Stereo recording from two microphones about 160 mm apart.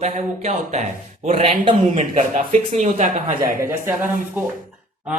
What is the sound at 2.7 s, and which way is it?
Speech, 45° right (ahead or behind).